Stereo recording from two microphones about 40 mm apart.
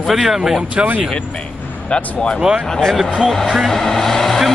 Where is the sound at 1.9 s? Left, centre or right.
Left.